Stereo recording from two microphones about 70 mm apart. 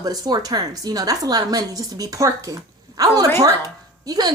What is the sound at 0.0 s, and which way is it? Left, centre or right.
A woman's voice, right.